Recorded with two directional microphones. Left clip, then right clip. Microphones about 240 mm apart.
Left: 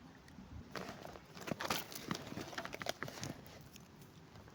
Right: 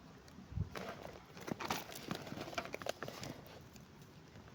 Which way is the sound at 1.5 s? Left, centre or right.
Left.